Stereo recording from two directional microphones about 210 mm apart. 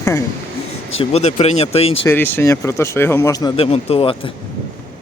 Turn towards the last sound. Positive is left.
turn(degrees=25)  # may be behind; listen again after turning